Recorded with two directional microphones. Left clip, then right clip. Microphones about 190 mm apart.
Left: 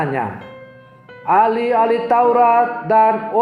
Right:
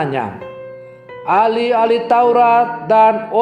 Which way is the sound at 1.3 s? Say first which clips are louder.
Right 1 dB; 30° right (ahead or behind).